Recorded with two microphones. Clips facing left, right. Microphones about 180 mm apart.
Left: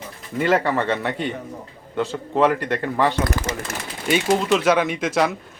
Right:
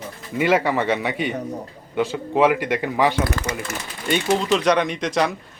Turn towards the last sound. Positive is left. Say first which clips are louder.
# left 1 dB
turn(degrees=5)  # may be behind; listen again after turning